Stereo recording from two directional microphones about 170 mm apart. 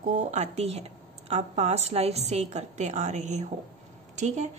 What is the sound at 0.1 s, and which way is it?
A woman's voice, 45° right (ahead or behind).